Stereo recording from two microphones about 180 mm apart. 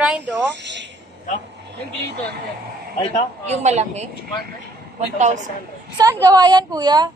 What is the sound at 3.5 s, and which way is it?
A woman's voice, 40° right (ahead or behind).